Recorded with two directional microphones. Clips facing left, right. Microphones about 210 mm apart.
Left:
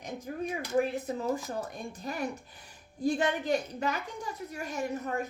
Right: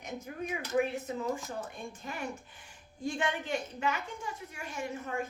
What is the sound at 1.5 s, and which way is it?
A woman's voice, 35° left (ahead or behind).